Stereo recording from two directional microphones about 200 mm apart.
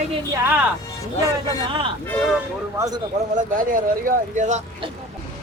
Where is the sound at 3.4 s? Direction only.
45° right (ahead or behind).